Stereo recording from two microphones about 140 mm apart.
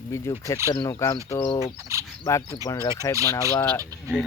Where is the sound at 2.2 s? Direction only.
20° left (ahead or behind).